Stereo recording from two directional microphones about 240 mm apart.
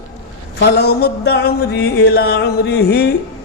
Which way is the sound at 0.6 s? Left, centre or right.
Left.